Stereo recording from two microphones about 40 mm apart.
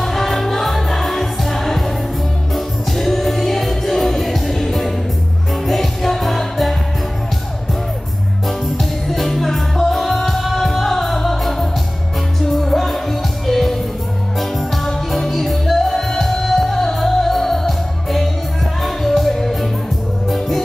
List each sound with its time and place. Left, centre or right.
0.0 s music: centre
8.5 s music: centre